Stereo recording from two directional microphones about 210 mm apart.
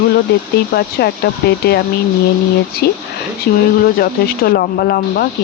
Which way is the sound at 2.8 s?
50° left (ahead or behind).